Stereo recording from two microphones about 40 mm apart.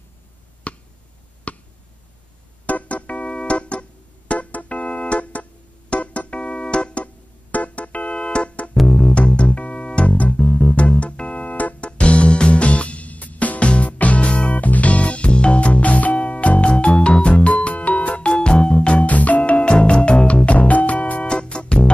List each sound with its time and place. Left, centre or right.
0.7 s a sound: left
1.5 s finger snapping: left
2.6 s organ: left
4.3 s music: left
7.5 s organ: left
8.1 s music: left
14.6 s music: left
19.0 s music: left